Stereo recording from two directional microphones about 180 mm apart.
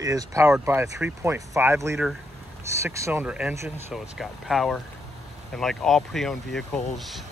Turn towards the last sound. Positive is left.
turn(degrees=0)  # may be behind; listen again after turning